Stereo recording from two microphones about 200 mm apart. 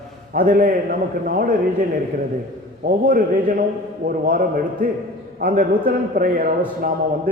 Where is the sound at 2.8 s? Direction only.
45° right (ahead or behind).